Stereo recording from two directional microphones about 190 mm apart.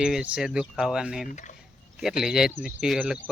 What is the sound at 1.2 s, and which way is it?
Speech, 40° left (ahead or behind).